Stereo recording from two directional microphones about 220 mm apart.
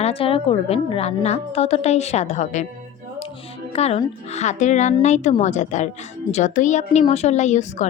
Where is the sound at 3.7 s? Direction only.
30° left (ahead or behind).